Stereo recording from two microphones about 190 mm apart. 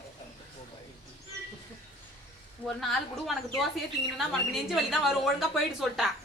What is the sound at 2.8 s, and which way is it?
Speech, centre (ahead or behind).